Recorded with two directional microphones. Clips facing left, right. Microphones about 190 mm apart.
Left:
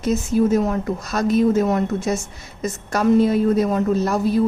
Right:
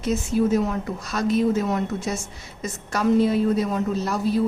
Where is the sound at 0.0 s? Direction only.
40° left (ahead or behind).